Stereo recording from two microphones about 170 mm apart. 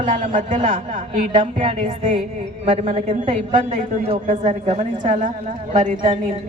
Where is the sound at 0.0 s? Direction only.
50° right (ahead or behind).